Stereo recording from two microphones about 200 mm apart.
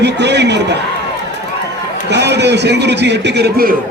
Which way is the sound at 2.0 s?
60° right (ahead or behind).